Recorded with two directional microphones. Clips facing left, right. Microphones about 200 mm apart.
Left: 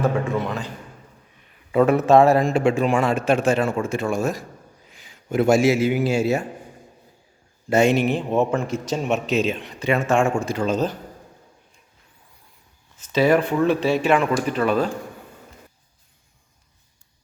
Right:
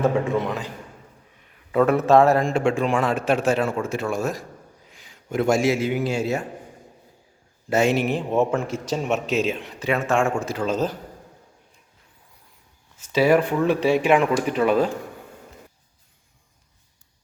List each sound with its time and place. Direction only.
0.0 s a man's voice: 20° right (ahead or behind)
1.7 s a man's voice: 5° left (ahead or behind)
7.7 s a man's voice: 5° right (ahead or behind)
13.0 s speech: 10° right (ahead or behind)